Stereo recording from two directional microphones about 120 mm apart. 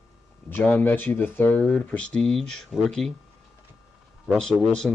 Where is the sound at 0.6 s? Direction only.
15° left (ahead or behind).